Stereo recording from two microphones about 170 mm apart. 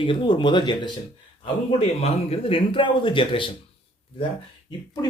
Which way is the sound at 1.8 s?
40° left (ahead or behind).